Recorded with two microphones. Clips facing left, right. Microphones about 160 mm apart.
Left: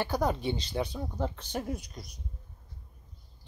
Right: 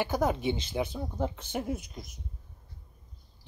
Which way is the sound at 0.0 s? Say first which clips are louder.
Right 1 dB; 15° right (ahead or behind).